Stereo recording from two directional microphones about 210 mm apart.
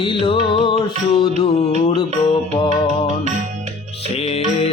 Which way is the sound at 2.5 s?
20° left (ahead or behind).